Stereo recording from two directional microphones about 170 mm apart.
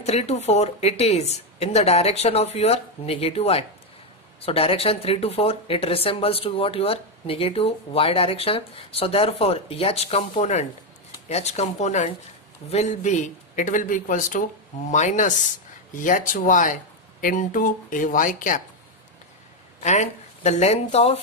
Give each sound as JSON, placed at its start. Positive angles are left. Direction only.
{"t": 0.0, "sound": "a man's voice", "side_deg": 40}
{"t": 19.8, "sound": "speech", "side_deg": 45}